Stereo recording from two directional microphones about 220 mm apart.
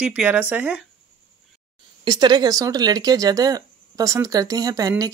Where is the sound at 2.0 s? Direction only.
20° right (ahead or behind).